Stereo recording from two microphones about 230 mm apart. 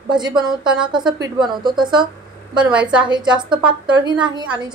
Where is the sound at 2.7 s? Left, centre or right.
Centre.